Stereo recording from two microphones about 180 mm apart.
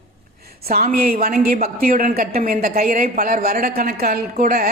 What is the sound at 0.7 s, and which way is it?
A woman's voice, 55° right (ahead or behind).